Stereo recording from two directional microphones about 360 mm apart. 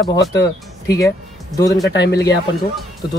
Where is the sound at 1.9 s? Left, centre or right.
Left.